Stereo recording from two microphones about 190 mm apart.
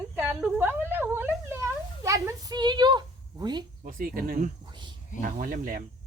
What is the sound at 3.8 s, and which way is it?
Speech, 45° right (ahead or behind).